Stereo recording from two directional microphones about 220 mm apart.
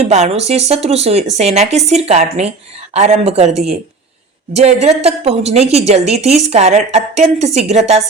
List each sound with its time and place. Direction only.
0.0 s a woman's voice: 30° right (ahead or behind)